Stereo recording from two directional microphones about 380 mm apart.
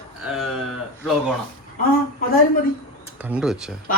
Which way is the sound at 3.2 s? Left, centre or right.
Centre.